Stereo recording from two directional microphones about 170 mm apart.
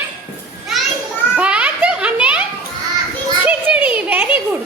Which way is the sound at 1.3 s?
5° right (ahead or behind).